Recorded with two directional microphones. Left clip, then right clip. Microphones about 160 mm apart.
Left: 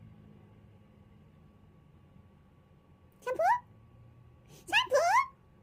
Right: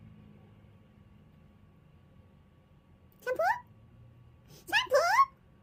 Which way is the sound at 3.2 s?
15° right (ahead or behind).